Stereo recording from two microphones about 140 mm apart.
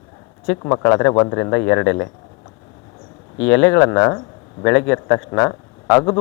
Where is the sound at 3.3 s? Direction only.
15° left (ahead or behind).